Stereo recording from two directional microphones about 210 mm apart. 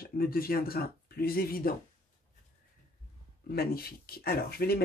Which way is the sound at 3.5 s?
45° left (ahead or behind).